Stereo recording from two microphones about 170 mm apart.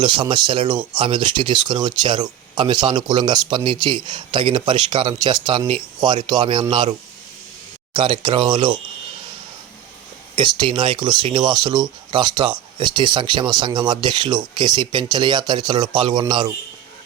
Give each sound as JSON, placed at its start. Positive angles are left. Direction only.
{"t": 0.0, "sound": "speech", "side_deg": -30}
{"t": 7.9, "sound": "speech", "side_deg": -30}
{"t": 10.6, "sound": "speech", "side_deg": -30}